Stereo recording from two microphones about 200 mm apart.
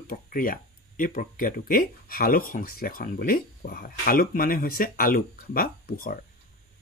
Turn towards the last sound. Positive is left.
turn(degrees=45)  # may be behind; listen again after turning